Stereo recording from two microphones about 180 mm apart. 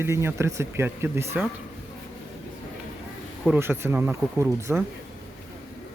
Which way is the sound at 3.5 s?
15° right (ahead or behind).